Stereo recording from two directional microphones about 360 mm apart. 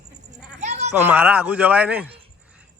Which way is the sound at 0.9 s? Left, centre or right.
Centre.